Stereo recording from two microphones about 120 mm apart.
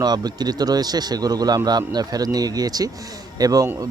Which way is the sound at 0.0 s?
35° right (ahead or behind).